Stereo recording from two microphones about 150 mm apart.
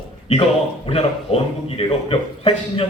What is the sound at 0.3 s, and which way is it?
A man's voice, 45° left (ahead or behind).